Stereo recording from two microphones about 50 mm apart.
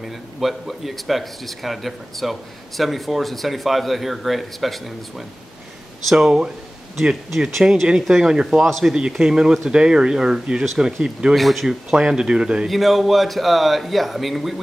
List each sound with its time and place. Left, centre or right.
0.0 s speech: centre
6.0 s speech: centre
8.6 s speech: centre
9.2 s speech: centre
11.3 s speech: centre
11.9 s speech: centre
12.6 s speech: centre